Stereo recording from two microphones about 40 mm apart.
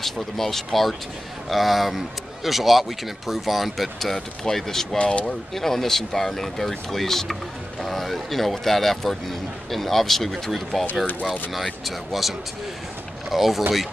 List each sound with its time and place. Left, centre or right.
0.0 s a man's voice: centre
4.9 s speech: left
5.2 s a man's voice: centre